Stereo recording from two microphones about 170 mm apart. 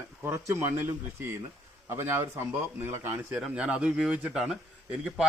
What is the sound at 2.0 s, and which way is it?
Speech, 15° right (ahead or behind).